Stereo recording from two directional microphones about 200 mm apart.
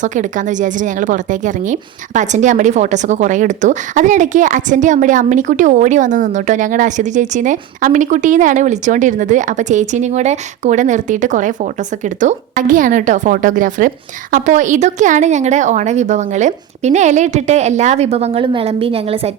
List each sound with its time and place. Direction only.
0.0 s a woman's voice: 40° right (ahead or behind)